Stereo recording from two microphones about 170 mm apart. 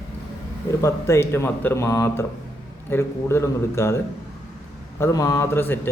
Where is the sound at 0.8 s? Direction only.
15° left (ahead or behind).